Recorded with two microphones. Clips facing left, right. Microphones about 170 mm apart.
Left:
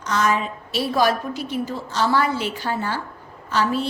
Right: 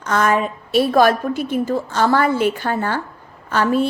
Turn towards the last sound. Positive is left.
turn(degrees=-55)  # may be behind; listen again after turning